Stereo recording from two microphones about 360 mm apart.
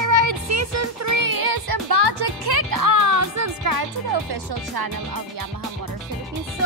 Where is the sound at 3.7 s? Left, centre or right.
Right.